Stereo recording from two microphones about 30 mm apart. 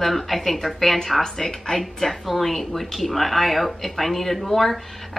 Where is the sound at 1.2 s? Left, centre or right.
Centre.